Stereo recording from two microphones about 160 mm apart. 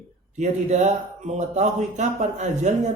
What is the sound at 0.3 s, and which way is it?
A man's voice, 45° right (ahead or behind).